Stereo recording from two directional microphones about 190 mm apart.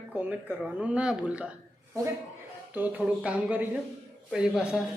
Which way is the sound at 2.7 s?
10° right (ahead or behind).